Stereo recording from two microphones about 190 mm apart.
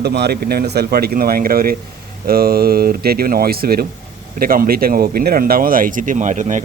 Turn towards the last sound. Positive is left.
turn(degrees=-40)  # may be behind; listen again after turning